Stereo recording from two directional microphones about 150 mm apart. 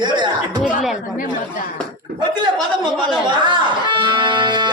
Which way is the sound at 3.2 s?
30° right (ahead or behind).